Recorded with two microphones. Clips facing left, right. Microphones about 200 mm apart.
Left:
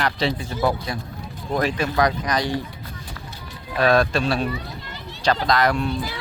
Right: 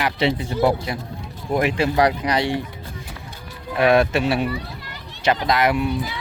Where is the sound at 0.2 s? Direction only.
25° right (ahead or behind).